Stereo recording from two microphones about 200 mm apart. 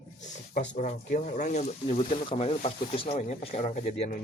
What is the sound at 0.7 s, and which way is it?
Speech, 35° left (ahead or behind).